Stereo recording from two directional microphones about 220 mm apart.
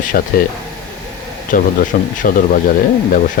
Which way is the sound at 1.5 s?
40° left (ahead or behind).